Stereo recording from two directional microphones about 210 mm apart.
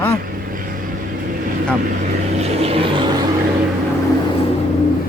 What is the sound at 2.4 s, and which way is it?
Vehicle, 30° right (ahead or behind).